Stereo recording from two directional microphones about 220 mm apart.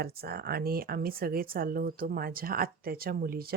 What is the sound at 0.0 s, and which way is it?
Speech, 45° right (ahead or behind).